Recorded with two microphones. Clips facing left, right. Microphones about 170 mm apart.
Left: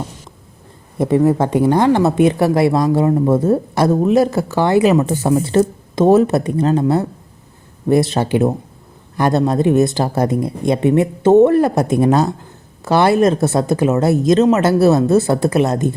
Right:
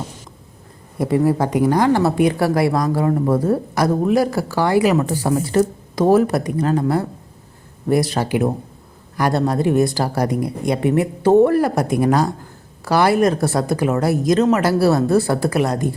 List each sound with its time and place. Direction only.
0.9 s a woman's voice: 20° left (ahead or behind)